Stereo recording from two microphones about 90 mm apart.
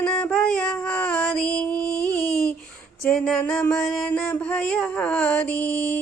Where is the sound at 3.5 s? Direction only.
20° left (ahead or behind).